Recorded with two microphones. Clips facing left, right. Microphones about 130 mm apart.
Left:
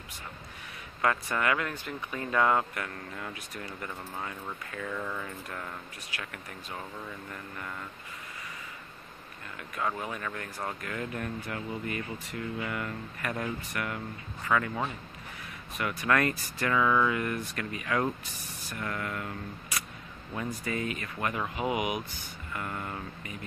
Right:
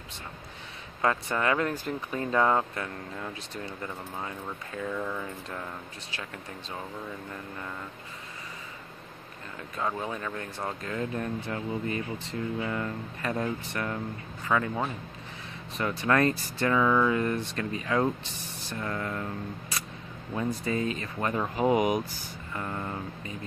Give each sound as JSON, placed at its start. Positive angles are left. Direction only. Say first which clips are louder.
{"t": 1.0, "sound": "speech", "louder": "right 2 dB", "side_deg": -30}
{"t": 4.7, "sound": "speech", "louder": "right 3 dB", "side_deg": -15}
{"t": 6.1, "sound": "speech", "louder": "right 2 dB", "side_deg": -25}
{"t": 9.8, "sound": "speech", "louder": "right 2 dB", "side_deg": -25}
{"t": 15.8, "sound": "speech", "louder": "right 3 dB", "side_deg": -30}
{"t": 20.3, "sound": "speech", "louder": "right 4 dB", "side_deg": -25}
{"t": 22.2, "sound": "speech", "louder": "right 2 dB", "side_deg": -25}